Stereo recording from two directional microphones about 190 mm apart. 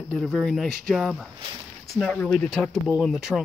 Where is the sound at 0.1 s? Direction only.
Centre (ahead or behind).